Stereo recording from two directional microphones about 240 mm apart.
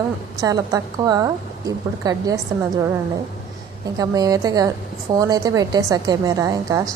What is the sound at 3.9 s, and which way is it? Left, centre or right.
A woman's voice, centre.